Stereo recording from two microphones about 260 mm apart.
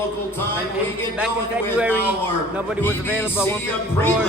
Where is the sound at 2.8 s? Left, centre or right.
Centre.